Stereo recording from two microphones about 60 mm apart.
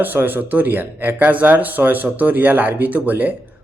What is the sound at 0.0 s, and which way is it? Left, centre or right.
A man's voice, right.